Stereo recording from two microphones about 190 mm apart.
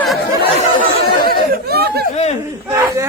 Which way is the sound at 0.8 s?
50° right (ahead or behind).